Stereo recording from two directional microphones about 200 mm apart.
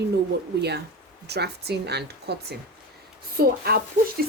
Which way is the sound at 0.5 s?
55° right (ahead or behind).